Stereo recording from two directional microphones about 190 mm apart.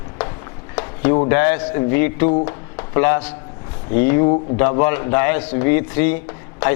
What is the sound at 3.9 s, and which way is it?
A man's voice, 15° left (ahead or behind).